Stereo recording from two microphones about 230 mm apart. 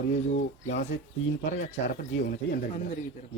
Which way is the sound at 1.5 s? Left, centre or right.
Left.